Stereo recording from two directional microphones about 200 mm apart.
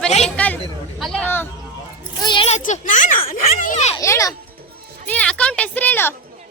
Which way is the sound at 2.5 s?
40° left (ahead or behind).